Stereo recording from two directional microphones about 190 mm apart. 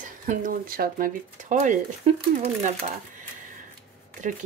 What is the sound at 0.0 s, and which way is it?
Speech, 45° right (ahead or behind).